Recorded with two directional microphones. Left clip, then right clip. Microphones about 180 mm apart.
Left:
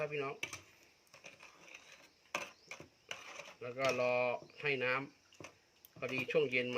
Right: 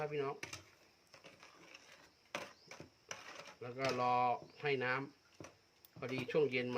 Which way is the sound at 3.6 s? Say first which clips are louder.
Left 3 dB; 35° right (ahead or behind).